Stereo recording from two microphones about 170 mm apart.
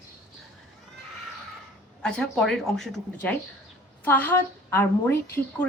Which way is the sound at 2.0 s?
5° left (ahead or behind).